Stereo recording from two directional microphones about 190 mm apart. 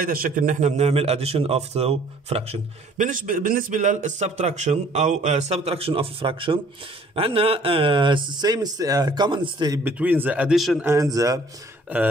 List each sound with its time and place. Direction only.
0.0 s a man's voice: 50° right (ahead or behind); by 9.8 s 25° right (ahead or behind)
9.8 s a man's voice: 10° right (ahead or behind)
10.9 s a man's voice: 15° right (ahead or behind)